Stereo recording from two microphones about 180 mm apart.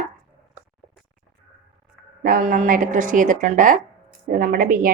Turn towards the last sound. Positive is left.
turn(degrees=-50)  # may be behind; listen again after turning